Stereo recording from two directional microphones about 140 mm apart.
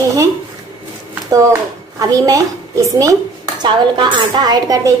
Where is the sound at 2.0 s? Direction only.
25° right (ahead or behind).